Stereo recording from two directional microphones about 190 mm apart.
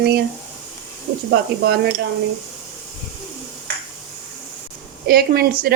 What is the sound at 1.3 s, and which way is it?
Speech, 60° right (ahead or behind).